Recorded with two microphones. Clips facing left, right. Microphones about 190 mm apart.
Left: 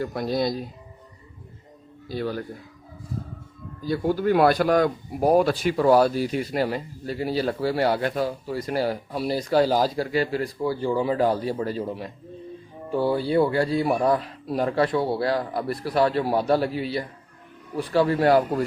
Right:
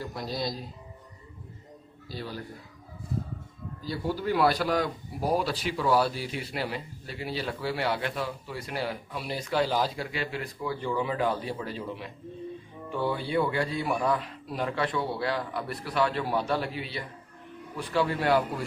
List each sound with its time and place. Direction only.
0.0 s speech: 55° left (ahead or behind)
2.0 s speech: 55° left (ahead or behind)
3.8 s speech: 50° left (ahead or behind)